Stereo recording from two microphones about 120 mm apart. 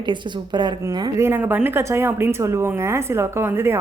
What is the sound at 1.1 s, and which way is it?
A woman's voice, 20° right (ahead or behind).